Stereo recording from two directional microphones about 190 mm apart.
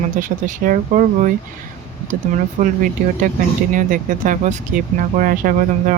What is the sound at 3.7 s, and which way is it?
Speech, 45° right (ahead or behind).